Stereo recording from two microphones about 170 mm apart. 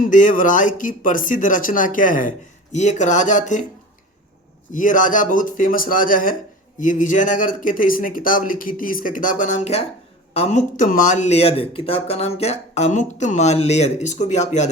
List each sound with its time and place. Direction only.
0.0 s speech: 50° left (ahead or behind)
4.7 s speech: 50° left (ahead or behind)